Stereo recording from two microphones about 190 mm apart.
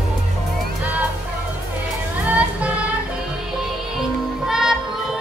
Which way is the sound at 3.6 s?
Centre (ahead or behind).